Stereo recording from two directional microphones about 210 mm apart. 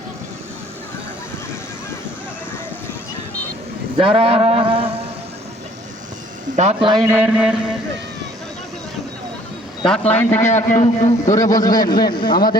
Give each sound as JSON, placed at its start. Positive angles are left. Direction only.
{"t": 3.9, "sound": "a man's voice", "side_deg": -25}
{"t": 6.6, "sound": "a man's voice", "side_deg": -30}
{"t": 7.1, "sound": "a sound", "side_deg": -5}
{"t": 9.8, "sound": "a man's voice", "side_deg": 5}
{"t": 10.5, "sound": "a man's voice", "side_deg": 35}
{"t": 11.3, "sound": "a man's voice", "side_deg": 15}